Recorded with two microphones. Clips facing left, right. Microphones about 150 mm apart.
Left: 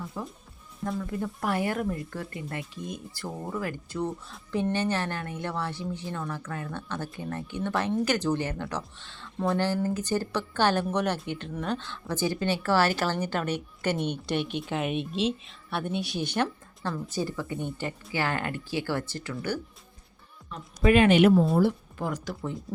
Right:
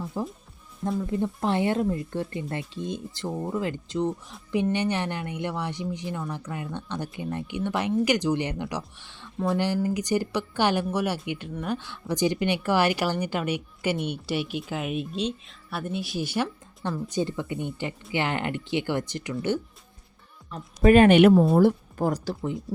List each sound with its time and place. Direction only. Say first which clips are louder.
0.1 s a woman's voice: right 6 dB; 30° right (ahead or behind); by 16.5 s 5° right (ahead or behind)
17.1 s speech: right 3 dB; 20° right (ahead or behind)
20.5 s a woman's voice: right 4 dB; 45° right (ahead or behind)
21.2 s a woman's voice: right 4 dB; 55° right (ahead or behind); by 22.4 s 35° right (ahead or behind)